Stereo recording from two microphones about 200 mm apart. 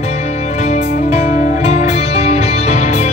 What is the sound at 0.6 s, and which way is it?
Music, 35° left (ahead or behind).